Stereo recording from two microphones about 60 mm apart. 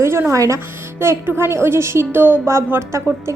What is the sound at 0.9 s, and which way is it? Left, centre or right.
A woman's voice, right.